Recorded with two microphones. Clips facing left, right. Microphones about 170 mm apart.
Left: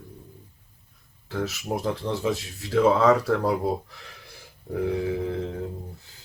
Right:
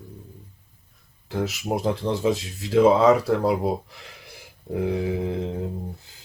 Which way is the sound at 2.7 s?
15° right (ahead or behind).